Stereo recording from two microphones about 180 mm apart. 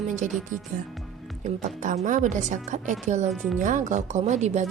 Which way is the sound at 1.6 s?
45° right (ahead or behind).